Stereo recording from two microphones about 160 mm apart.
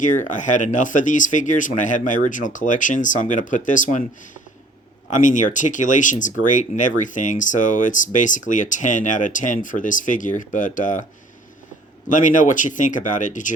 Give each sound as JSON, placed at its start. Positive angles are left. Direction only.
{"t": 0.0, "sound": "speech", "side_deg": 50}
{"t": 5.2, "sound": "speech", "side_deg": 50}
{"t": 12.0, "sound": "speech", "side_deg": 50}